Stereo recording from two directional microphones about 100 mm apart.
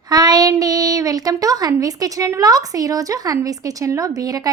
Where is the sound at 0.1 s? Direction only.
40° right (ahead or behind).